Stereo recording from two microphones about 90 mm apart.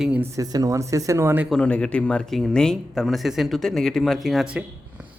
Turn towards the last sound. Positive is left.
turn(degrees=0)  # may be behind; listen again after turning